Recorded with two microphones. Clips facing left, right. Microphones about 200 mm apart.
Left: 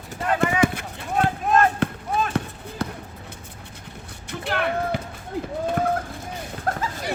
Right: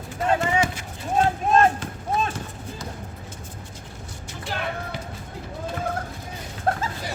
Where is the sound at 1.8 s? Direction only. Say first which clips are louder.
Left 10 dB; 65° left (ahead or behind).